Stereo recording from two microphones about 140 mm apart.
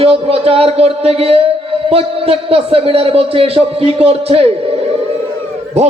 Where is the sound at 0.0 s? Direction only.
45° right (ahead or behind).